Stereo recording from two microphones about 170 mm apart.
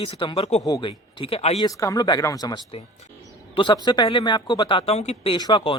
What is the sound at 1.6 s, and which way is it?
Speech, 20° left (ahead or behind).